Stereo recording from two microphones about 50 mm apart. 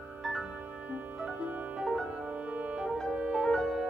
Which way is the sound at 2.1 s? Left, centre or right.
Right.